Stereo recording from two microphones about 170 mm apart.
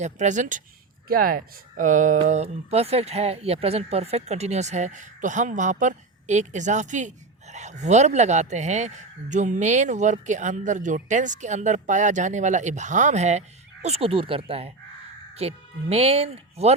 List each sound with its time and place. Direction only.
0.0 s speech: 45° right (ahead or behind)
1.0 s speech: 60° right (ahead or behind); by 16.7 s 35° right (ahead or behind)